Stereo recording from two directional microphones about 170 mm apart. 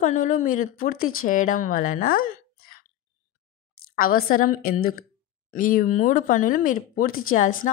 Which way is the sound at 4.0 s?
60° left (ahead or behind).